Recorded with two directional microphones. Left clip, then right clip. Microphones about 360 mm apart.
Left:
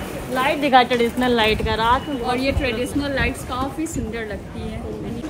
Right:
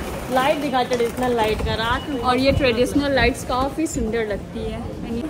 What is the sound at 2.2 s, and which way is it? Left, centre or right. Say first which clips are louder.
A woman's voice: right 4 dB; centre.